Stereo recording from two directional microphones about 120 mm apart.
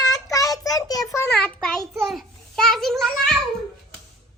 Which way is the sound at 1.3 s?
10° left (ahead or behind).